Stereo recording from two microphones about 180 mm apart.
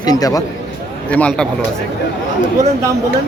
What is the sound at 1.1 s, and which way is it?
Speech, 5° left (ahead or behind).